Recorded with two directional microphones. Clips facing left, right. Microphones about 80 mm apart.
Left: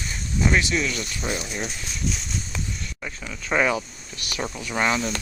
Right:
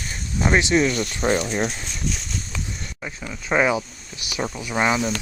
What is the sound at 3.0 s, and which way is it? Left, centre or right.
Speech, centre.